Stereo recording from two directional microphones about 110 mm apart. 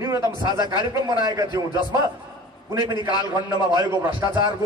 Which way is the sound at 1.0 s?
40° right (ahead or behind).